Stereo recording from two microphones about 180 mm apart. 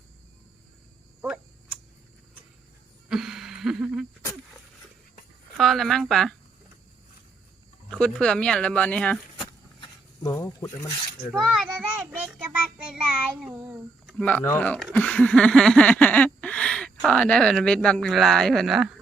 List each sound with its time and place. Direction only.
3.1 s a sound: 5° right (ahead or behind)
5.5 s speech: centre (ahead or behind)
7.9 s speech: 5° left (ahead or behind)
10.2 s speech: 15° left (ahead or behind)
11.2 s speech: 5° right (ahead or behind)
12.7 s child singing: 5° right (ahead or behind)
14.2 s speech: 10° left (ahead or behind)
14.9 s a sound: 5° left (ahead or behind)